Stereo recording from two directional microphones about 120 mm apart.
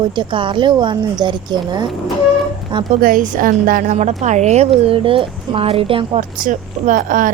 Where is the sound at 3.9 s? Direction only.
70° right (ahead or behind).